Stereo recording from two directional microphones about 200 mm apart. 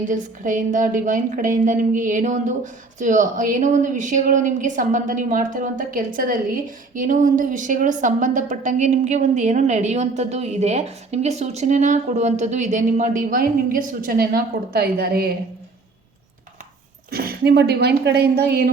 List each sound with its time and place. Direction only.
0.1 s a woman's voice: 40° right (ahead or behind)
17.1 s a woman's voice: 50° right (ahead or behind)